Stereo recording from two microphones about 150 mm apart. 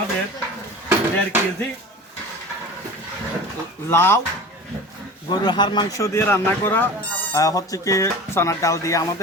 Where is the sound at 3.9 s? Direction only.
15° left (ahead or behind).